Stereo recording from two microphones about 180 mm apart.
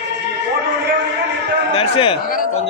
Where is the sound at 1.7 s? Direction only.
30° left (ahead or behind).